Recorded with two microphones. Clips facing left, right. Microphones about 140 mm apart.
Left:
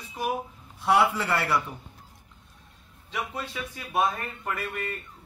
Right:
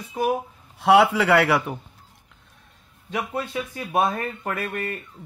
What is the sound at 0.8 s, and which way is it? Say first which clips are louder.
Speech: right 6 dB; 90° right.